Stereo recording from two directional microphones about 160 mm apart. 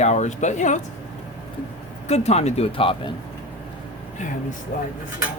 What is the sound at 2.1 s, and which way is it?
Speech, 40° left (ahead or behind).